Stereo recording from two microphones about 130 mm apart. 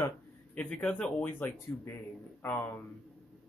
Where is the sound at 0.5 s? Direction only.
10° left (ahead or behind).